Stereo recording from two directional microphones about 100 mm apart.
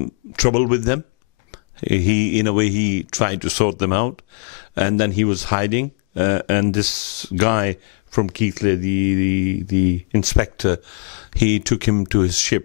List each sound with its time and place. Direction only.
0.0 s speech: 15° left (ahead or behind)